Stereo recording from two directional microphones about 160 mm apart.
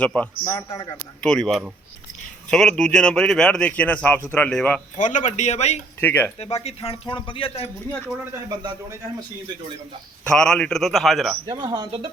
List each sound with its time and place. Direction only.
0.0 s speech: 5° left (ahead or behind)
0.4 s a man's voice: 20° left (ahead or behind)
0.9 s speech: 5° left (ahead or behind)
4.9 s a man's voice: 50° left (ahead or behind)
6.0 s speech: 15° left (ahead or behind)
6.4 s speech: 40° left (ahead or behind)
8.4 s a man's voice: 20° right (ahead or behind)
10.3 s speech: 5° left (ahead or behind)
11.4 s a man's voice: 25° right (ahead or behind)